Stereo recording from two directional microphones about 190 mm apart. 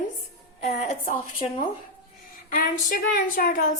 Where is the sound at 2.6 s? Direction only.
45° left (ahead or behind).